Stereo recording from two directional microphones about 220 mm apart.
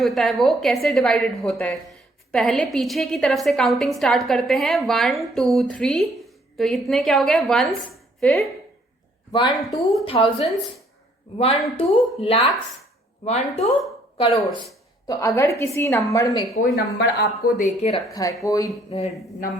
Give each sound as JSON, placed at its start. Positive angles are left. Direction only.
{"t": 0.0, "sound": "a woman's voice", "side_deg": 0}
{"t": 9.6, "sound": "a woman's voice", "side_deg": 0}
{"t": 10.1, "sound": "a woman's voice", "side_deg": 25}
{"t": 15.0, "sound": "a woman's voice", "side_deg": 15}
{"t": 16.7, "sound": "speech", "side_deg": 50}
{"t": 17.9, "sound": "a woman's voice", "side_deg": 15}
{"t": 18.9, "sound": "speech", "side_deg": 30}